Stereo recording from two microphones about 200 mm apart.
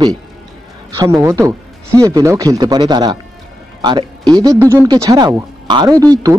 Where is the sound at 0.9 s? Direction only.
15° right (ahead or behind).